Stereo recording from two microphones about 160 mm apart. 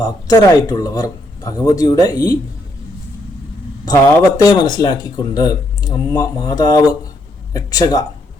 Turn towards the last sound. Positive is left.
turn(degrees=25)  # may be behind; listen again after turning